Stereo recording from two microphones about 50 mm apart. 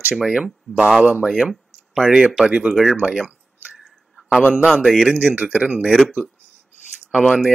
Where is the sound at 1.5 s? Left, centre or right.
Centre.